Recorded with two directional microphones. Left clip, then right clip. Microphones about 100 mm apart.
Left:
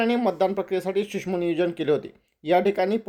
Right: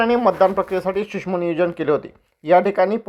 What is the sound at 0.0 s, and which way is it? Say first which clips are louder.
Speech: right 7 dB; 15° left (ahead or behind).